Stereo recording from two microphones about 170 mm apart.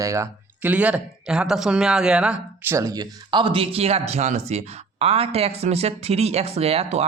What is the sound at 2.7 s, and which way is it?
Speech, 20° right (ahead or behind).